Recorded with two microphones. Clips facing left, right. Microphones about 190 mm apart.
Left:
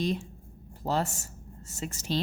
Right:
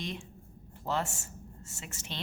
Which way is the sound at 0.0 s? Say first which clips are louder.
Left 9 dB; 35° left (ahead or behind).